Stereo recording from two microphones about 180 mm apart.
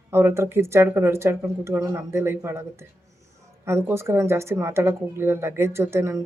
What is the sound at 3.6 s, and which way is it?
Speech, 15° right (ahead or behind).